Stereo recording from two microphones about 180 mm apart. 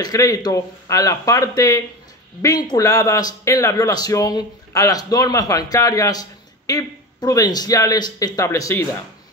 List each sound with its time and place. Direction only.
0.0 s a man's voice: 20° left (ahead or behind)